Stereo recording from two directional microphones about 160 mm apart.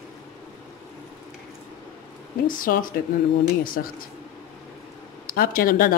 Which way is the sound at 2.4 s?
60° left (ahead or behind).